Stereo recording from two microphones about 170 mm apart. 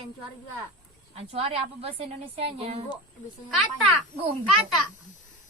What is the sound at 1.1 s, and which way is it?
A woman's voice, 35° right (ahead or behind).